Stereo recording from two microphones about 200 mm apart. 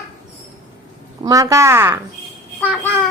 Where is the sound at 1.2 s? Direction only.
15° right (ahead or behind).